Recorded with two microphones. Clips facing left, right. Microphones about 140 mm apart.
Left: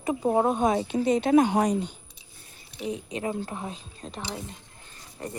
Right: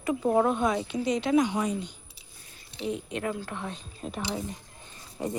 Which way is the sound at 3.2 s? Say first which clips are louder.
Left 2 dB; 30° left (ahead or behind).